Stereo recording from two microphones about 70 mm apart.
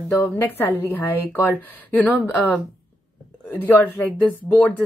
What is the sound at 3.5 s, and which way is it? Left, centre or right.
A woman's voice, left.